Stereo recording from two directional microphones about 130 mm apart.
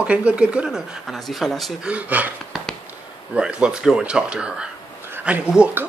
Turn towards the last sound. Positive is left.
turn(degrees=-10)  # may be behind; listen again after turning